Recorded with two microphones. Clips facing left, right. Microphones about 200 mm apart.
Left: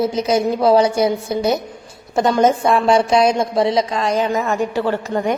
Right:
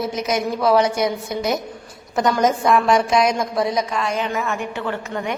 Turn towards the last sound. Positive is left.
turn(degrees=35)  # may be behind; listen again after turning